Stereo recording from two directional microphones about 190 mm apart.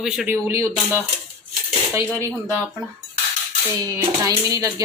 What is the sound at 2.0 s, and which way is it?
Speech, 10° left (ahead or behind).